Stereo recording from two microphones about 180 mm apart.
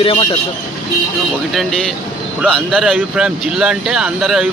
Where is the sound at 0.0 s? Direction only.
30° left (ahead or behind).